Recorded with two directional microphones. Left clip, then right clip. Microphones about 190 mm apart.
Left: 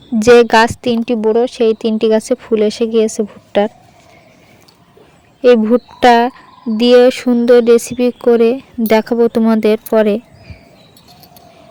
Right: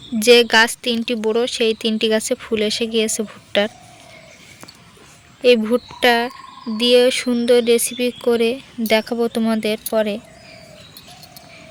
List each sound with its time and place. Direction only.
0.2 s speech: 45° left (ahead or behind)
1.0 s speech: 35° left (ahead or behind)
5.4 s a woman's voice: 40° left (ahead or behind)
6.0 s speech: 50° left (ahead or behind)